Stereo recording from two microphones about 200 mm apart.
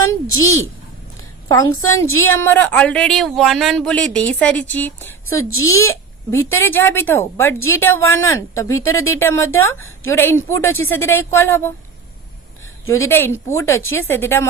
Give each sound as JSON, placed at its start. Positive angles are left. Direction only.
{"t": 0.3, "sound": "a woman's voice", "side_deg": 15}
{"t": 5.2, "sound": "speech", "side_deg": 90}
{"t": 6.3, "sound": "a woman's voice", "side_deg": 10}
{"t": 12.8, "sound": "a woman's voice", "side_deg": 15}